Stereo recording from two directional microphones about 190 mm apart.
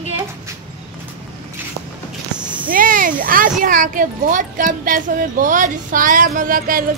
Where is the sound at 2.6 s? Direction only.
45° right (ahead or behind).